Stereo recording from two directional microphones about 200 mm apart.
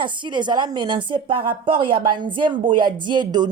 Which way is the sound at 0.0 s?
25° right (ahead or behind).